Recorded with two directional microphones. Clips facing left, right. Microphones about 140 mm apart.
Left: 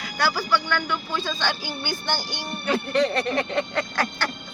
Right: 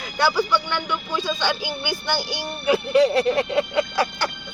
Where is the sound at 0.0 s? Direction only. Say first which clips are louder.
Right 4 dB; 20° right (ahead or behind).